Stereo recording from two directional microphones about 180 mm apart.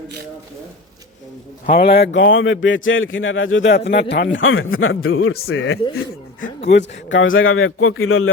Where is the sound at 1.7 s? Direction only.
60° left (ahead or behind); by 5.8 s 90° left.